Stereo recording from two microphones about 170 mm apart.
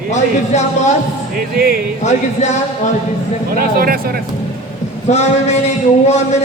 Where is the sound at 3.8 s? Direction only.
60° right (ahead or behind).